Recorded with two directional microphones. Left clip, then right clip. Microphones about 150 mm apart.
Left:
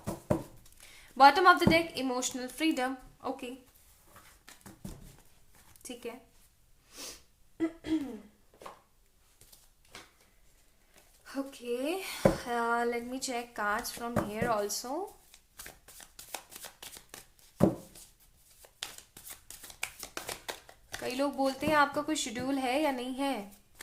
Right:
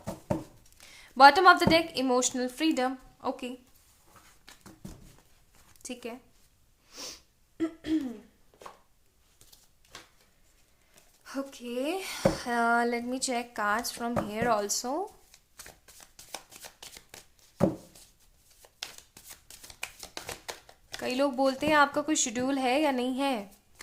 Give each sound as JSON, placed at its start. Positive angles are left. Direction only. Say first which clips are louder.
{"t": 0.8, "sound": "speech", "louder": "right 3 dB", "side_deg": -35}
{"t": 4.4, "sound": "a sound", "louder": "right 2 dB", "side_deg": -10}
{"t": 5.8, "sound": "speech", "louder": "right 2 dB", "side_deg": -30}
{"t": 6.9, "sound": "sniff", "louder": "right 3 dB", "side_deg": -40}
{"t": 7.6, "sound": "a sound", "louder": "right 2 dB", "side_deg": -55}
{"t": 10.9, "sound": "speech", "louder": "right 2 dB", "side_deg": -40}
{"t": 15.3, "sound": "shuffling cards", "louder": "even", "side_deg": -5}
{"t": 17.6, "sound": "a sound", "louder": "even", "side_deg": 0}
{"t": 18.6, "sound": "shuffling cards", "louder": "right 1 dB", "side_deg": 0}
{"t": 21.0, "sound": "speech", "louder": "right 4 dB", "side_deg": -40}